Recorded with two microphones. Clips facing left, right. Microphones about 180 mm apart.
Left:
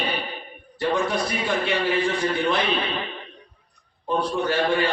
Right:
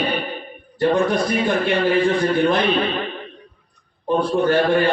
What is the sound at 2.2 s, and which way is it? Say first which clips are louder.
Speech: right 5 dB; 50° right (ahead or behind).